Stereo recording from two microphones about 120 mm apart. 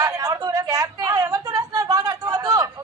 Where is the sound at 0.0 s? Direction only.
30° right (ahead or behind).